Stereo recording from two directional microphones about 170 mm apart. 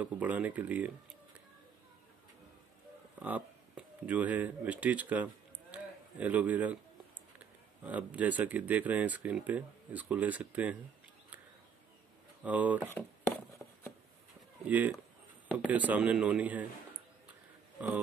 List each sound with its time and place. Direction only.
0.0 s speech: 10° right (ahead or behind)
3.2 s speech: 10° right (ahead or behind)
7.8 s speech: 10° right (ahead or behind)
12.4 s speech: 10° right (ahead or behind)
14.7 s speech: 10° right (ahead or behind)
17.7 s speech: 10° right (ahead or behind)